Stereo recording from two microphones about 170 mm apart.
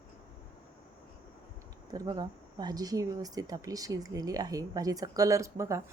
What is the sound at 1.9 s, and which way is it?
Speech, 25° right (ahead or behind).